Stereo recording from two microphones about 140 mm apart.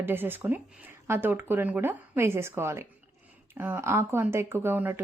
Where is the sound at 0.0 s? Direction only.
15° right (ahead or behind).